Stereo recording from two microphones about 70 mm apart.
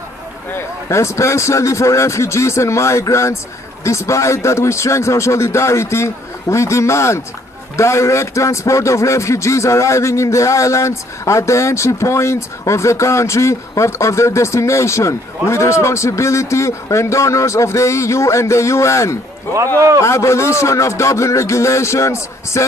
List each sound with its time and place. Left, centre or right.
0.8 s speech: left